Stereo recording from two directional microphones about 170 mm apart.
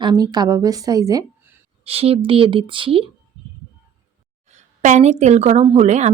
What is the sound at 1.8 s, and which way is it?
Speech, 35° right (ahead or behind).